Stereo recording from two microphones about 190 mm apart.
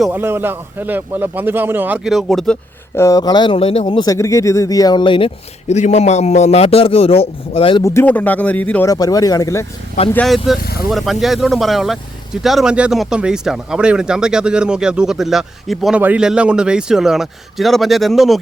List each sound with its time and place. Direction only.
0.0 s a man's voice: 10° right (ahead or behind)
2.9 s speech: 15° left (ahead or behind)
7.8 s speech: 15° left (ahead or behind)
8.9 s speech: 20° left (ahead or behind)
10.1 s speech: 5° left (ahead or behind)
10.6 s speech: 55° left (ahead or behind)
10.9 s speech: centre (ahead or behind)